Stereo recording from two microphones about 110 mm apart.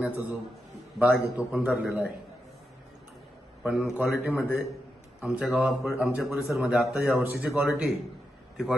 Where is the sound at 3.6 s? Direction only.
10° right (ahead or behind).